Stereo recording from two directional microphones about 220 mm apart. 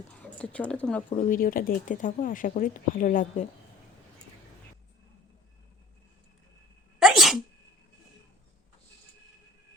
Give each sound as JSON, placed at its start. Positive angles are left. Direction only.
{"t": 0.2, "sound": "speech", "side_deg": 5}
{"t": 1.1, "sound": "speech", "side_deg": 35}
{"t": 7.0, "sound": "sneeze", "side_deg": 0}